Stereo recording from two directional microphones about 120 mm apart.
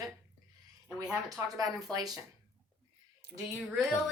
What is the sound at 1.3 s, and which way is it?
Speech, 30° right (ahead or behind).